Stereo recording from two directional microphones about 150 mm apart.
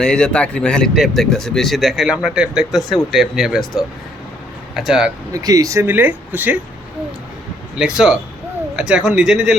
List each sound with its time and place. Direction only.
0.0 s speech: 5° left (ahead or behind)
5.3 s speech: 25° right (ahead or behind)
7.8 s speech: 5° right (ahead or behind)